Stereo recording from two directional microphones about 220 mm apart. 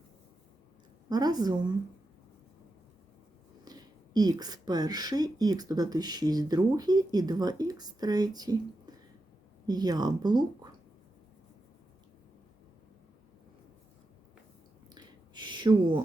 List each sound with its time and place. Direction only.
1.1 s speech: 15° right (ahead or behind)
3.6 s speech: 20° right (ahead or behind)
9.6 s speech: 15° right (ahead or behind)
14.9 s a sound: 20° right (ahead or behind)